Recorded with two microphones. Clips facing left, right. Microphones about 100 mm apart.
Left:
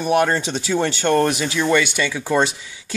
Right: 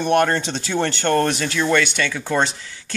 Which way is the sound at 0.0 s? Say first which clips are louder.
Even; 5° left (ahead or behind).